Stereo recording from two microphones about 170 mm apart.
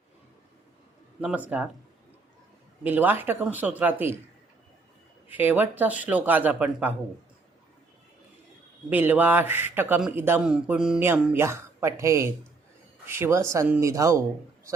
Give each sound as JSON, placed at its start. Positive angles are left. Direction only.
{"t": 1.2, "sound": "a man's voice", "side_deg": -10}
{"t": 2.8, "sound": "a man's voice", "side_deg": -10}
{"t": 5.4, "sound": "a man's voice", "side_deg": -10}
{"t": 8.9, "sound": "a man's voice", "side_deg": -10}